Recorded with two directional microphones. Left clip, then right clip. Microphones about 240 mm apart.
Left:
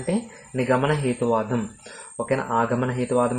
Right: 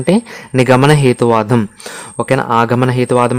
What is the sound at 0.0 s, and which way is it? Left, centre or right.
Speech, right.